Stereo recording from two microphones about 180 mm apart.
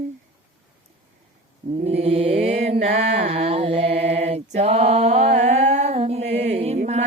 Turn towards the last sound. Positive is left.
turn(degrees=-35)  # may be behind; listen again after turning